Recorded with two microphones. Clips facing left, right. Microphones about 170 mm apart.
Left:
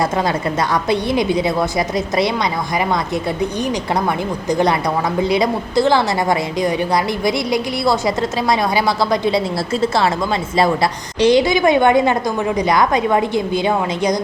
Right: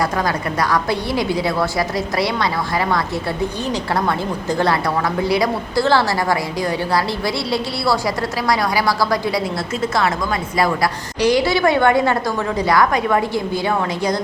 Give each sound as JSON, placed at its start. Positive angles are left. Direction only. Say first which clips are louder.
{"t": 0.7, "sound": "a woman's voice", "louder": "left 4 dB", "side_deg": 20}
{"t": 3.7, "sound": "a woman's voice", "louder": "left 1 dB", "side_deg": 15}
{"t": 11.2, "sound": "a woman's voice", "louder": "left 3 dB", "side_deg": 25}